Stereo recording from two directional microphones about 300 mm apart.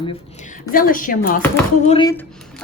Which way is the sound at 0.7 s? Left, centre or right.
Left.